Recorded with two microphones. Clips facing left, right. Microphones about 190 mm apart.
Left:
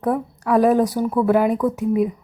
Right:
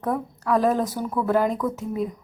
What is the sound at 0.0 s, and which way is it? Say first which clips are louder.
Speech: left 4 dB; 10° left (ahead or behind).